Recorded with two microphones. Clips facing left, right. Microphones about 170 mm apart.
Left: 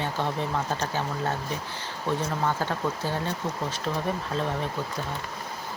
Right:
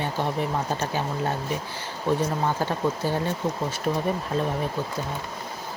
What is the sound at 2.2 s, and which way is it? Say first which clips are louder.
Speech: right 2 dB; 15° right (ahead or behind).